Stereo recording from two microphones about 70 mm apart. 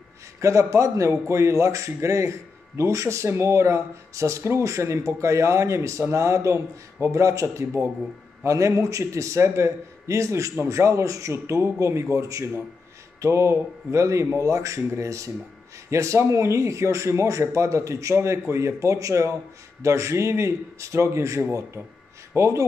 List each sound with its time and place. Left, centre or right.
0.4 s speech: right